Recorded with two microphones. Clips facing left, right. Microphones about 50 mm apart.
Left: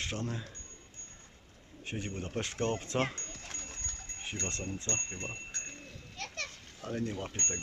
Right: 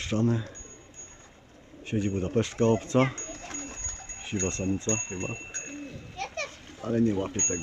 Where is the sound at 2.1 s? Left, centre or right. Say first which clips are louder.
Right 11 dB; right.